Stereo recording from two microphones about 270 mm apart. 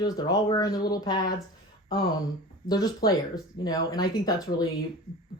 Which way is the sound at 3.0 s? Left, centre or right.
Centre.